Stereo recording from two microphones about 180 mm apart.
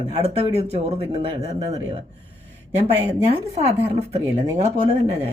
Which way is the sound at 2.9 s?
30° right (ahead or behind).